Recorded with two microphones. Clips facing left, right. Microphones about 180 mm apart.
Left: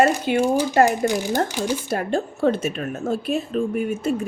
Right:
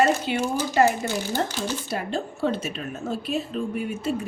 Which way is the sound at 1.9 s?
50° left (ahead or behind).